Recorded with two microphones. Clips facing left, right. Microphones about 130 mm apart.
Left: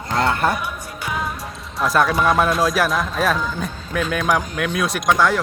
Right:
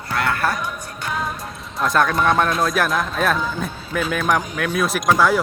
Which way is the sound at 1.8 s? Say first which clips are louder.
Left 1 dB; 5° left (ahead or behind).